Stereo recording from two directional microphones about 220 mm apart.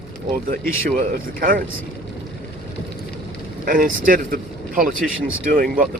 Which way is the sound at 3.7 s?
35° right (ahead or behind).